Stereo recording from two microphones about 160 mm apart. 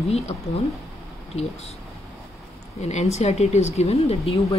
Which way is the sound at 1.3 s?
40° left (ahead or behind).